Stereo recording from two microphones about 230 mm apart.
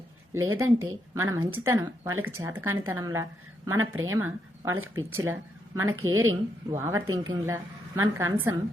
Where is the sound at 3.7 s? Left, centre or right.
Right.